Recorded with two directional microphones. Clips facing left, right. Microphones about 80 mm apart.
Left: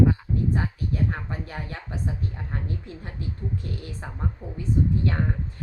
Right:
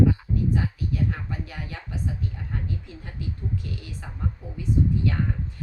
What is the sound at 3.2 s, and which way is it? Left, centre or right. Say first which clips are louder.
A woman's voice: even; left.